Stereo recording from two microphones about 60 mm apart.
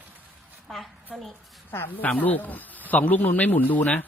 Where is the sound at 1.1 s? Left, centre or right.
Centre.